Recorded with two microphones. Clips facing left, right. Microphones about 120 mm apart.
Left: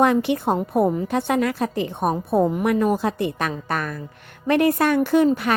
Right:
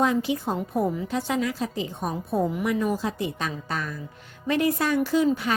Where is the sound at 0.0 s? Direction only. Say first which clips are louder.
Left 5 dB; 65° left (ahead or behind).